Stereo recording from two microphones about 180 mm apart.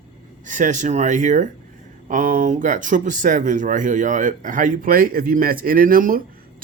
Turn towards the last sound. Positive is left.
turn(degrees=-50)  # may be behind; listen again after turning